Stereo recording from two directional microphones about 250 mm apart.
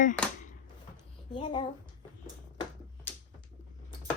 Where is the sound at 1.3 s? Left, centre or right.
Left.